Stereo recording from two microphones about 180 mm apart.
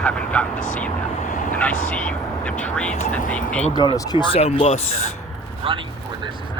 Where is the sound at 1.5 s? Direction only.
10° left (ahead or behind).